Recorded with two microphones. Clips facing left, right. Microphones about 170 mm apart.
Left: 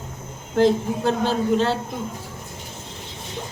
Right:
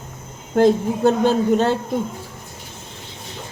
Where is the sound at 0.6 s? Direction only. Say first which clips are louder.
Right 3 dB; 50° right (ahead or behind).